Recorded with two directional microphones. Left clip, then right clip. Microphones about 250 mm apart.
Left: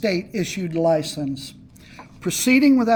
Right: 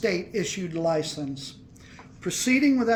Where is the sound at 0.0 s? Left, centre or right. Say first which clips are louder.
Left 3 dB; left.